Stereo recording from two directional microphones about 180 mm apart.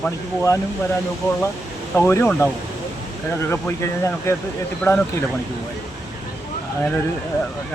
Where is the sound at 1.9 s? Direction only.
15° left (ahead or behind).